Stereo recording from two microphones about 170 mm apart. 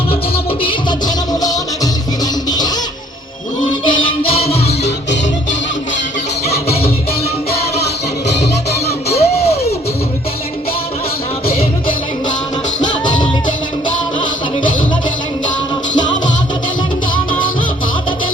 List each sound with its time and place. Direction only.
0.6 s music: 30° left (ahead or behind)
3.8 s music: 35° left (ahead or behind)
6.4 s music: 35° left (ahead or behind)
9.0 s a sound: 35° left (ahead or behind)
12.8 s music: 25° left (ahead or behind)